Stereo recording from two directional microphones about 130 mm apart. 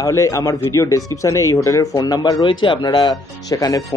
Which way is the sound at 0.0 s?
25° left (ahead or behind).